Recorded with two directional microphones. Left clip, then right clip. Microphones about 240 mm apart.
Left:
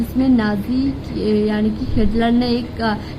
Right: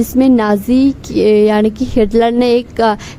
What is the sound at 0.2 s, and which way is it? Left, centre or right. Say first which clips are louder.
A woman's voice: right 7 dB; right.